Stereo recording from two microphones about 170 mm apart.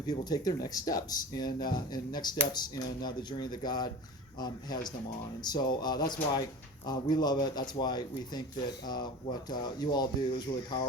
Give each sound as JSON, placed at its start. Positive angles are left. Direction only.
{"t": 0.1, "sound": "speech", "side_deg": 25}
{"t": 9.5, "sound": "speech", "side_deg": 25}